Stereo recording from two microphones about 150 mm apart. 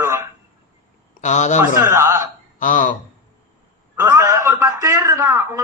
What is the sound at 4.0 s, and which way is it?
A man's voice, 20° right (ahead or behind).